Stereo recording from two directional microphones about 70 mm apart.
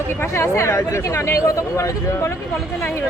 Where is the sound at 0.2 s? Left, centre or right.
Left.